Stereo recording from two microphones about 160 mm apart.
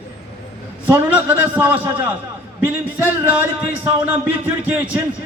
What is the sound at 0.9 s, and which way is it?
A man's voice, 10° right (ahead or behind).